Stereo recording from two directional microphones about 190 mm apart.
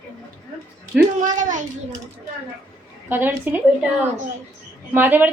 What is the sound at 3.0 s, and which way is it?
Speech, 10° right (ahead or behind).